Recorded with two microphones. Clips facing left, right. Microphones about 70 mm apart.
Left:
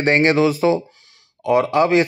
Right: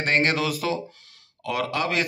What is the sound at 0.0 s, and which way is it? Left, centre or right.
A man's voice, left.